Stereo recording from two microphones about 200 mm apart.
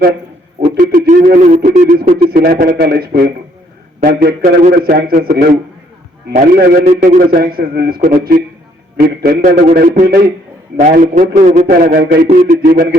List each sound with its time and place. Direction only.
0.6 s speech: 45° right (ahead or behind)
2.3 s a man's voice: 50° right (ahead or behind)
10.8 s a man's voice: 40° right (ahead or behind)
12.3 s a man's voice: 35° right (ahead or behind)
12.7 s a man's voice: 50° right (ahead or behind)